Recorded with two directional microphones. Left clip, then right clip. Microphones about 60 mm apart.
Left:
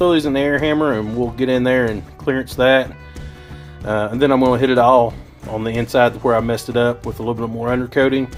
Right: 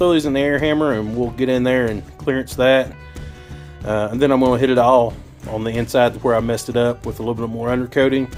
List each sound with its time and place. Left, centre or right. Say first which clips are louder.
0.0 s speech: left 1 dB; centre
6.4 s speech: left 1 dB; centre